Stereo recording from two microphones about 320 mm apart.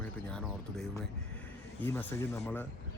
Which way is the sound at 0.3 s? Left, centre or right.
Centre.